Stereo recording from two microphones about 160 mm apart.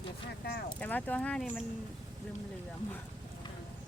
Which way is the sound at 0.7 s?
10° left (ahead or behind).